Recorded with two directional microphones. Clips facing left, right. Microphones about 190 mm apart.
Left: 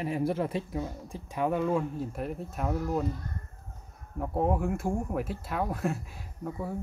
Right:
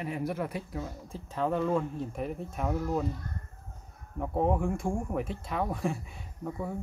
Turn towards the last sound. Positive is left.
turn(degrees=0)  # may be behind; listen again after turning